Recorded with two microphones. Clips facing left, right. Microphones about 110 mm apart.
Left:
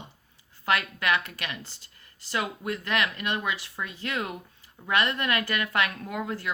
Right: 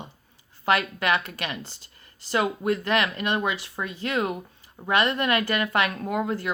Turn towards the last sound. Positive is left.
turn(degrees=-30)  # may be behind; listen again after turning